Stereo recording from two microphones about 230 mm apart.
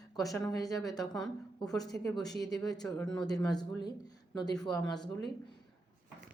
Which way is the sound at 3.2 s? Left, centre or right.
Centre.